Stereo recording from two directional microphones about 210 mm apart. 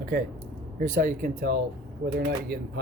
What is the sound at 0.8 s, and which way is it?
Speech, 40° right (ahead or behind).